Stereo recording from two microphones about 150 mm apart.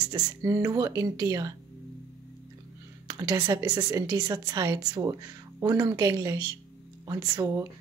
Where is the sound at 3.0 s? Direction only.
25° right (ahead or behind).